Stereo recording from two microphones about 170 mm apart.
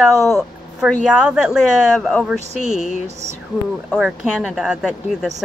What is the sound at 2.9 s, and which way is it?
Music, 40° right (ahead or behind).